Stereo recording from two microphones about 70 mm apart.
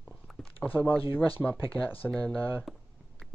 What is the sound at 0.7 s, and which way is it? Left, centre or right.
Speech, left.